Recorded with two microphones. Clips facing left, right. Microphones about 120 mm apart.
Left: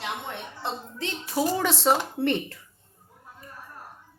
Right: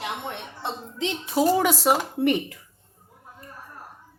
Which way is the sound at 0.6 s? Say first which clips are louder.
Right 4 dB; 20° right (ahead or behind).